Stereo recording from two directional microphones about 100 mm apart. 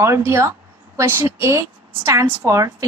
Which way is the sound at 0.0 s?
30° right (ahead or behind).